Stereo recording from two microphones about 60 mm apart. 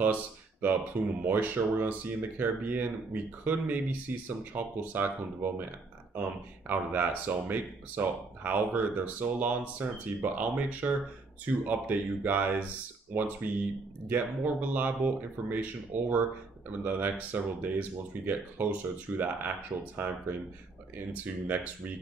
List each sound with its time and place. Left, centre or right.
0.0 s speech: right
6.7 s speech: right